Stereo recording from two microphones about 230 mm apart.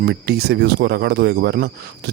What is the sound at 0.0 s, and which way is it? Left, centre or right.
Speech, right.